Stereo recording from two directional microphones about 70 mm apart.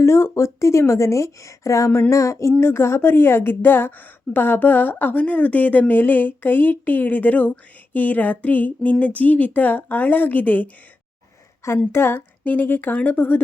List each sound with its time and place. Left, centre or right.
0.0 s speech: left
2.5 s speech: left
11.9 s speech: left